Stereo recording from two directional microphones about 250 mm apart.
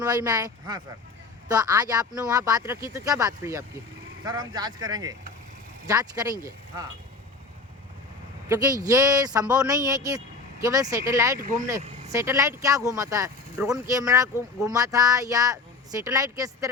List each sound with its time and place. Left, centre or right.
0.0 s speech: centre
8.4 s speech: centre
11.8 s vehicle: right
12.1 s speech: centre